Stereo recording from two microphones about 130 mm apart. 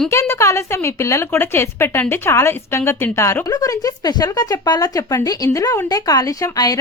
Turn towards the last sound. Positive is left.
turn(degrees=30)  # may be behind; listen again after turning